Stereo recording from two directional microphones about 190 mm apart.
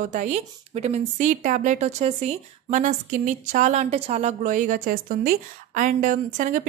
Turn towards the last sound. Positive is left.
turn(degrees=-45)  # may be behind; listen again after turning